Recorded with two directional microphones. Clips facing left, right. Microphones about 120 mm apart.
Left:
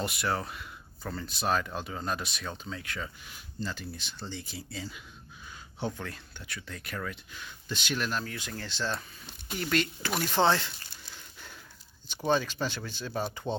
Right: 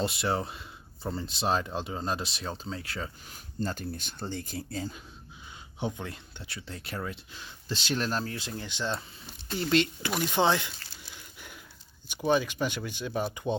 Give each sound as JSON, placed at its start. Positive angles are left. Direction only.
{"t": 0.0, "sound": "speech", "side_deg": -25}
{"t": 5.8, "sound": "speech", "side_deg": -20}
{"t": 8.5, "sound": "speech", "side_deg": -15}
{"t": 10.2, "sound": "speech", "side_deg": -15}
{"t": 11.1, "sound": "a sound", "side_deg": -15}
{"t": 12.0, "sound": "speech", "side_deg": -10}